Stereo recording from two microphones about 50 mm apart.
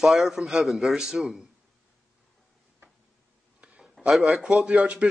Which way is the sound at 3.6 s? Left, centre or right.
Right.